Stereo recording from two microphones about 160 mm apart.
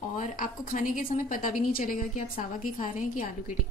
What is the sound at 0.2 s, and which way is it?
A woman's voice, 55° left (ahead or behind).